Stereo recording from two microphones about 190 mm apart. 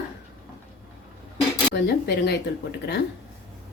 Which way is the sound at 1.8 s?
60° left (ahead or behind).